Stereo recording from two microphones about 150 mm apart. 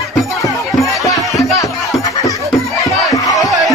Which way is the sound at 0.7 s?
Centre (ahead or behind).